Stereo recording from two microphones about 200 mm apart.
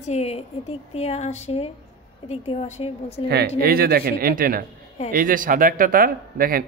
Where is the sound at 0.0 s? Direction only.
30° left (ahead or behind).